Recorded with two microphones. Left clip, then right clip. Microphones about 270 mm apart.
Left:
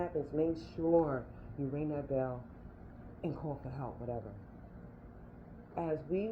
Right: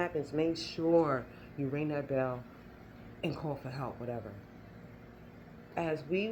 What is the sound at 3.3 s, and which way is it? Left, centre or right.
Speech, right.